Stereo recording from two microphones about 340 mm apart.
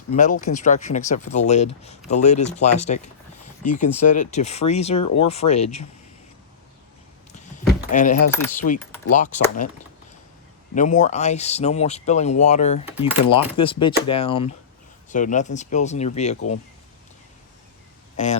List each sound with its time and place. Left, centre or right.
0.1 s speech: left
7.3 s keys jangling: left
8.3 s speech: centre
9.1 s speech: left
10.8 s speech: left
18.2 s speech: left